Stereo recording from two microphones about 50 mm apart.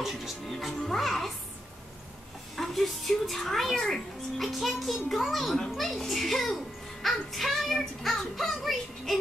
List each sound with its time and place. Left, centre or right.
0.0 s music: centre
2.5 s a sound: centre
4.5 s music: centre
5.1 s a child's voice: centre
5.8 s music: centre